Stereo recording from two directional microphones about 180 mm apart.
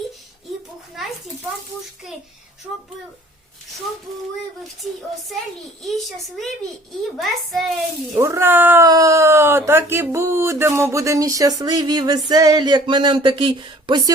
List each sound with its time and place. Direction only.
5.8 s a child's voice: centre (ahead or behind)
8.1 s speech: 15° right (ahead or behind)